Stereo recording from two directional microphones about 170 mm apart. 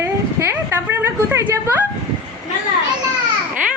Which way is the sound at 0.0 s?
15° right (ahead or behind).